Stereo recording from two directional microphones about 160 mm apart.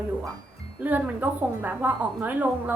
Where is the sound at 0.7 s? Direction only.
10° right (ahead or behind).